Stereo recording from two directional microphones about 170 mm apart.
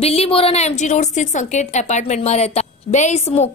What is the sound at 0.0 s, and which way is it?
A woman's voice, 35° left (ahead or behind).